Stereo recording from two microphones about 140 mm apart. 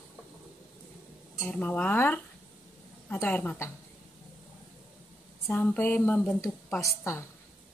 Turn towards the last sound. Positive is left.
turn(degrees=20)  # may be behind; listen again after turning